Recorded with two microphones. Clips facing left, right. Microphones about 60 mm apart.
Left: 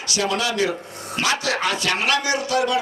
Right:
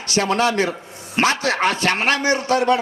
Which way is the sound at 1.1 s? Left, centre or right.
Right.